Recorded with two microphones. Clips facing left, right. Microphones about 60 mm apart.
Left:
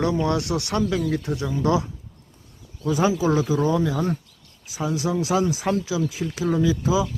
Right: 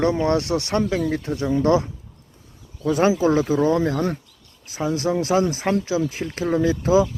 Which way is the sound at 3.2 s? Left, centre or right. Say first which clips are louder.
Right 3 dB; right.